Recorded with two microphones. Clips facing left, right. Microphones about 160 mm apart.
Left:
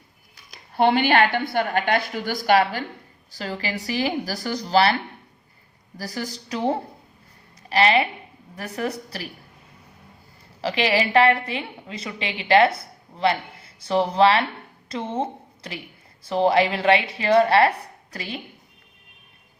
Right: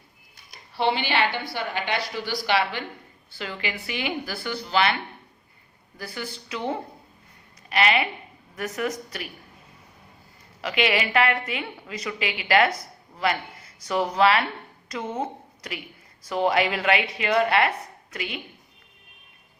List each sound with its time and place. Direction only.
0.7 s a woman's voice: 50° left (ahead or behind)
6.0 s speech: 40° left (ahead or behind)
10.6 s a woman's voice: 30° left (ahead or behind)